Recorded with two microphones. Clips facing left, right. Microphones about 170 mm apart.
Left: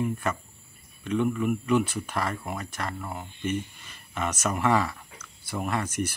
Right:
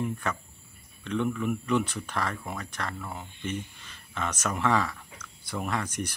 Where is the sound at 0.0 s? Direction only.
5° left (ahead or behind).